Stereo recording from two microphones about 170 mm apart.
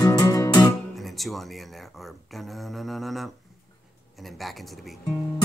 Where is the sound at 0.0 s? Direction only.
20° left (ahead or behind).